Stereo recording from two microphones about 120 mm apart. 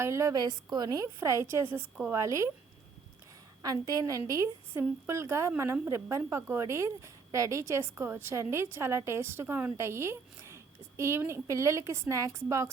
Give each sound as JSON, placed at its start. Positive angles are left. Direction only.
{"t": 0.0, "sound": "a woman's voice", "side_deg": -25}
{"t": 3.6, "sound": "a woman's voice", "side_deg": -30}